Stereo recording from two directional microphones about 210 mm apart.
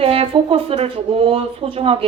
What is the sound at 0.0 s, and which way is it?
Speech, 25° right (ahead or behind).